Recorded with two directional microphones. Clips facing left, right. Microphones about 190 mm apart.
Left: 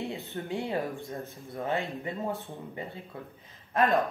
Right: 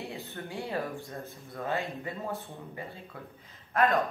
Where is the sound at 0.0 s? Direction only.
20° left (ahead or behind).